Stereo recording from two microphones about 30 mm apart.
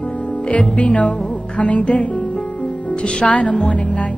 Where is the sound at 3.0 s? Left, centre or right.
Left.